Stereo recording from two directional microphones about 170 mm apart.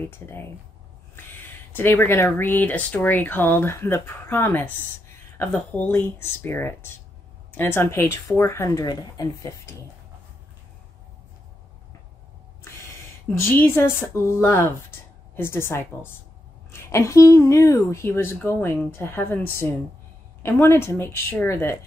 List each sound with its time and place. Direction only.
1.7 s speech: 15° left (ahead or behind)
12.6 s speech: 15° left (ahead or behind)